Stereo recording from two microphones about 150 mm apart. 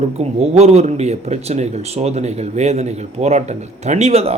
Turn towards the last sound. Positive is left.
turn(degrees=-45)  # may be behind; listen again after turning